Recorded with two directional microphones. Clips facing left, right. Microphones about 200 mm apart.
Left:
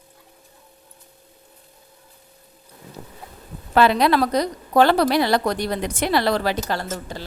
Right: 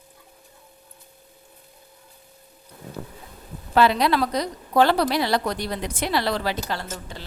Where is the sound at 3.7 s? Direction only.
55° left (ahead or behind).